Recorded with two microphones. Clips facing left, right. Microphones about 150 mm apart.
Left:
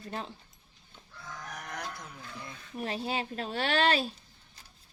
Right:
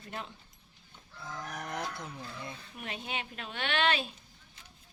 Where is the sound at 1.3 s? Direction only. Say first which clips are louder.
Right 3 dB; 25° right (ahead or behind).